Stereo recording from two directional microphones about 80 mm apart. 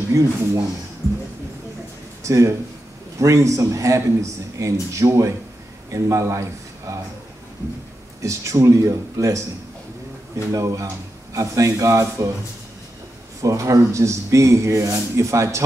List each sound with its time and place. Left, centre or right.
0.1 s speech: right
2.2 s speech: right
8.2 s speech: right
13.4 s speech: right